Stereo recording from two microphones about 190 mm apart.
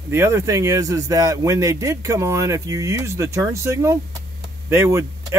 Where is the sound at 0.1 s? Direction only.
15° right (ahead or behind).